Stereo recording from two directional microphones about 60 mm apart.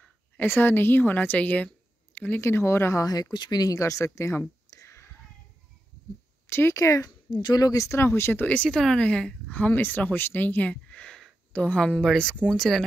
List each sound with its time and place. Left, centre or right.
0.6 s a woman's voice: left
2.4 s speech: left
3.0 s speech: left
4.8 s whispering: left
6.4 s a sound: left
6.7 s speech: left
8.0 s a woman's voice: left
8.6 s speech: centre
12.0 s speech: centre